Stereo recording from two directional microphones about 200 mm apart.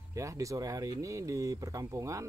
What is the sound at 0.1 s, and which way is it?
Speech, 15° right (ahead or behind).